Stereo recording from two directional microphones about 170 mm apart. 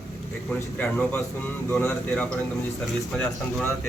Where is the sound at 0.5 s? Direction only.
10° left (ahead or behind).